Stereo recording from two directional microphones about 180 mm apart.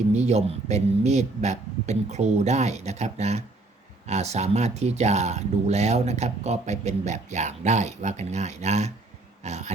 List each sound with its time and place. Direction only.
0.1 s speech: 40° right (ahead or behind)